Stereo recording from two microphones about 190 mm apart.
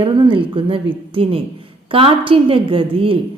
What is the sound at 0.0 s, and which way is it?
A woman's voice, 25° right (ahead or behind).